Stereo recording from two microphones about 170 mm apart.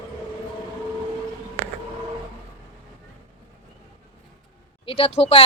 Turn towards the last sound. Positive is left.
turn(degrees=35)  # may be behind; listen again after turning